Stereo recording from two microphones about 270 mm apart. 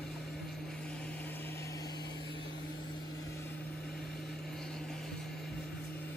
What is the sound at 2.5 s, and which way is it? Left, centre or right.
Vehicle, left.